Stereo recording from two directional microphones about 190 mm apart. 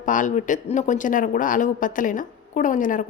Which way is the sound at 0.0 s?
45° left (ahead or behind).